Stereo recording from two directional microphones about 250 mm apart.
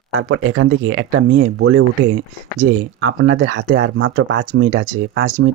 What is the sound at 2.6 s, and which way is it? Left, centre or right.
Speech, right.